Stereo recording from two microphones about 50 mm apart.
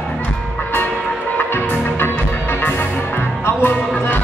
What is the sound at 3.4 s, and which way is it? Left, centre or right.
Music, left.